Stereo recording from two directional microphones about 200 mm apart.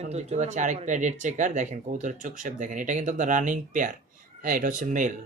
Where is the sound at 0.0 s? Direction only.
35° right (ahead or behind).